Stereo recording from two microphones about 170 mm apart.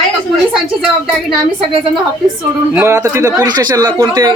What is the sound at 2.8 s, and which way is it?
A man's voice, 15° right (ahead or behind).